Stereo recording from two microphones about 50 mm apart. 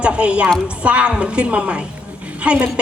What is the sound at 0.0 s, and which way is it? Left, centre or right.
A woman's voice, right.